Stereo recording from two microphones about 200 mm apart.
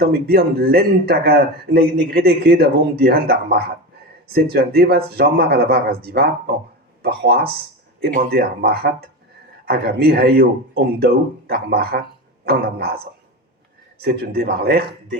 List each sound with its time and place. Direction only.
0.0 s speech: 50° right (ahead or behind)
14.0 s speech: 55° right (ahead or behind)